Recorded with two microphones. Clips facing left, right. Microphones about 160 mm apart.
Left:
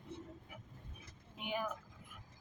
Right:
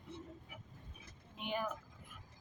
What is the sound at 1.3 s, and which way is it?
Vehicle, 10° left (ahead or behind).